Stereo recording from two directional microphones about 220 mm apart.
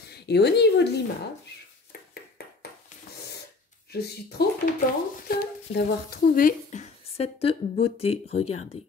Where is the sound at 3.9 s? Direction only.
45° left (ahead or behind).